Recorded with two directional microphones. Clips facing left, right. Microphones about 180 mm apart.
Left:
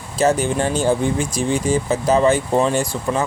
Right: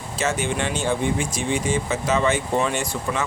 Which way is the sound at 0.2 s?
35° left (ahead or behind).